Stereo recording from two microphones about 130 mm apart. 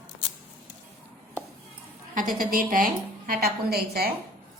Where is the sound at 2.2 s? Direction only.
90° right.